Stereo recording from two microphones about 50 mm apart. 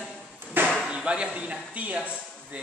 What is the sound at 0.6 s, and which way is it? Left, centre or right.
Chop, right.